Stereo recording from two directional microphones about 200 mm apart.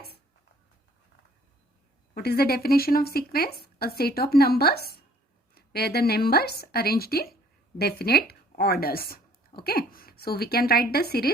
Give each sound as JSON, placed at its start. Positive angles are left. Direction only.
{"t": 2.1, "sound": "speech", "side_deg": 50}